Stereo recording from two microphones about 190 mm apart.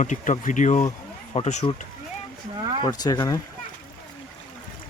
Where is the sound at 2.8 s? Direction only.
20° left (ahead or behind).